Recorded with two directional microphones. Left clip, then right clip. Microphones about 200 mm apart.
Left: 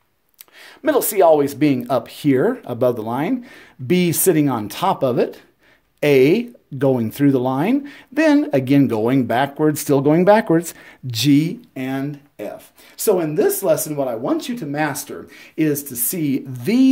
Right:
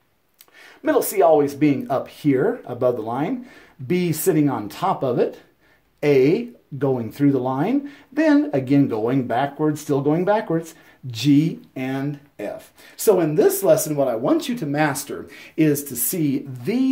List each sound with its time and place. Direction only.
0.8 s speech: 45° left (ahead or behind)
11.7 s speech: 20° left (ahead or behind)
16.6 s speech: 40° left (ahead or behind)